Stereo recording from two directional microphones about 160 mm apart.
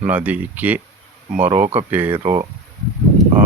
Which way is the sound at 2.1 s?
30° right (ahead or behind).